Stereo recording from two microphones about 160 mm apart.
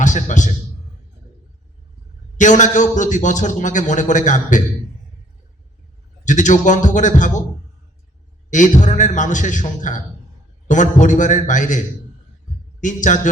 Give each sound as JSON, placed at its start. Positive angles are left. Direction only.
{"t": 0.0, "sound": "a man's voice", "side_deg": 50}
{"t": 2.4, "sound": "a man's voice", "side_deg": 50}
{"t": 6.2, "sound": "a man's voice", "side_deg": 50}
{"t": 8.4, "sound": "a man's voice", "side_deg": 50}
{"t": 11.0, "sound": "a man's voice", "side_deg": 50}
{"t": 12.8, "sound": "a man's voice", "side_deg": 50}